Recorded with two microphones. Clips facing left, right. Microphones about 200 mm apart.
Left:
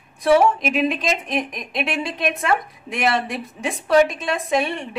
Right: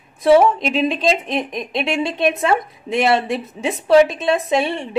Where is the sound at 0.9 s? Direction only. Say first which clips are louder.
Right 4 dB; 25° right (ahead or behind).